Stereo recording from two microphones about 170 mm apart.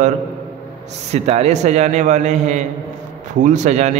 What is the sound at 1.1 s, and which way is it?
A man's voice, 40° right (ahead or behind).